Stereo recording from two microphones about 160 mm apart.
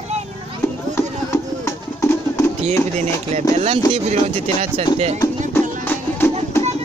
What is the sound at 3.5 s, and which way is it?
Speech, 40° right (ahead or behind).